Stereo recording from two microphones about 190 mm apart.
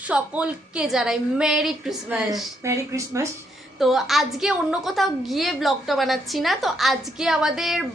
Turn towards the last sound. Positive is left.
turn(degrees=0)  # may be behind; listen again after turning